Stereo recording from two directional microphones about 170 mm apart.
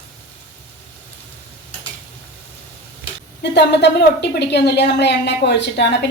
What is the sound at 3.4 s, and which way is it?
A woman's voice, 80° left.